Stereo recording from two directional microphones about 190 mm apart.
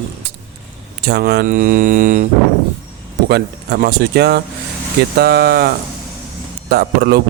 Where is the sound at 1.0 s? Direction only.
60° right (ahead or behind); by 2.2 s 45° right (ahead or behind).